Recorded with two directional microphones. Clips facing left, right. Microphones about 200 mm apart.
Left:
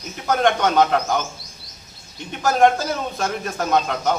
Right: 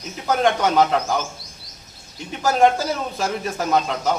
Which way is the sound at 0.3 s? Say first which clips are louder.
Even; 5° right (ahead or behind).